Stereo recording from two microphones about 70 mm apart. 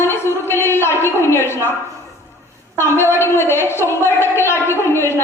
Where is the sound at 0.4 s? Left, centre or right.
Left.